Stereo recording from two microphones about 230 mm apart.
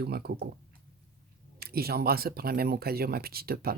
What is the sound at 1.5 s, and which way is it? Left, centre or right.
Speech, right.